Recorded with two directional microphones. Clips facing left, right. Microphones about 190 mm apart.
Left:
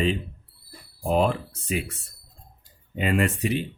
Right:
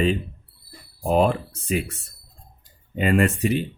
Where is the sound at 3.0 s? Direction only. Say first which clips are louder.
Right 4 dB; 45° right (ahead or behind).